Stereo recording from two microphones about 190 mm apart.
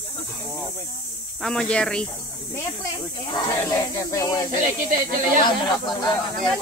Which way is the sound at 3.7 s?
15° left (ahead or behind).